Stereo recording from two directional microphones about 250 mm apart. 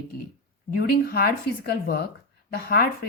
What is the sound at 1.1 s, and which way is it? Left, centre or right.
Speech, left.